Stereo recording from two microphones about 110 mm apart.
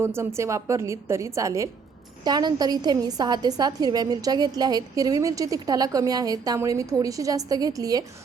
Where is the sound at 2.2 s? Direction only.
40° right (ahead or behind).